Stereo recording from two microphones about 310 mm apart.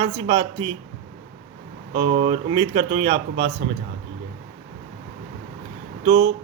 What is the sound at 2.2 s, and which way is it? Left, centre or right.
Speech, centre.